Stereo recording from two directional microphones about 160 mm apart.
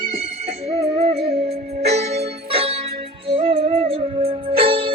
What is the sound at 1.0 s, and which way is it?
Music, 40° right (ahead or behind).